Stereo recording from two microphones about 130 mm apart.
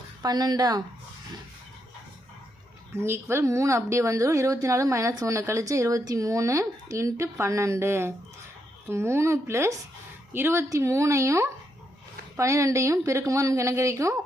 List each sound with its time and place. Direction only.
0.2 s speech: 30° right (ahead or behind)
2.9 s speech: 20° right (ahead or behind)